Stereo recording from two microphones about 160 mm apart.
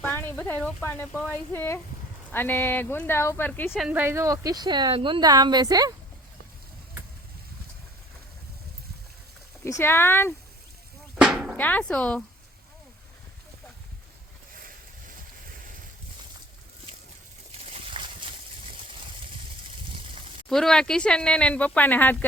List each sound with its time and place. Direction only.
0.0 s speech: 10° left (ahead or behind)
3.8 s a woman's voice: 10° right (ahead or behind); by 5.9 s 25° right (ahead or behind)
9.6 s speech: 15° left (ahead or behind)
11.2 s drum: 5° right (ahead or behind)
11.5 s speech: 10° left (ahead or behind)
17.7 s a sound: 30° right (ahead or behind)
20.5 s speech: 5° left (ahead or behind)